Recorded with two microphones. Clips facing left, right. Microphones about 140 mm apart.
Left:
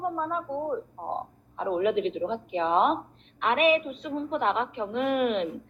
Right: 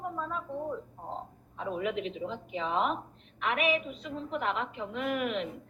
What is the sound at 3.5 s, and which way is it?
Speech, 20° left (ahead or behind).